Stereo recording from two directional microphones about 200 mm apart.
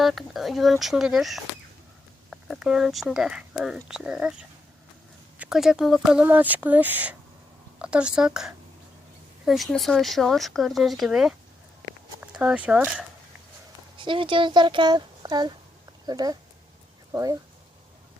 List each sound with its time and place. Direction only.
0.0 s speech: centre (ahead or behind)
14.0 s speech: 25° right (ahead or behind)